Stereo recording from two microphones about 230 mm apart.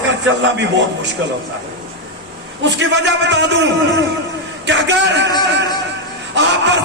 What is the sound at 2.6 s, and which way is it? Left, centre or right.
A man's voice, right.